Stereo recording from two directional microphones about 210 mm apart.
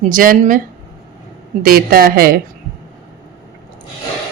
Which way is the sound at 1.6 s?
45° right (ahead or behind).